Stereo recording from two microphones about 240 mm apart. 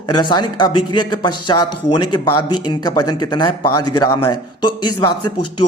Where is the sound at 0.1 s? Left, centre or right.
Centre.